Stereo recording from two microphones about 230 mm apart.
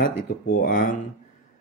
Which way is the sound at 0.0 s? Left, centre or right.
Left.